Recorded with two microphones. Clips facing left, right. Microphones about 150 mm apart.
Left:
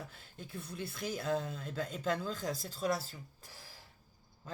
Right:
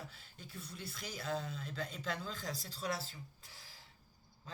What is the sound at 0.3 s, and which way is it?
Speech, 55° left (ahead or behind).